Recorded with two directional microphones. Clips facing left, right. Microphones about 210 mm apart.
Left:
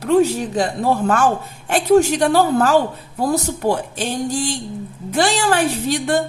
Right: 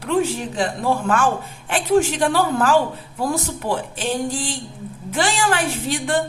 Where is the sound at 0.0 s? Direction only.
40° left (ahead or behind).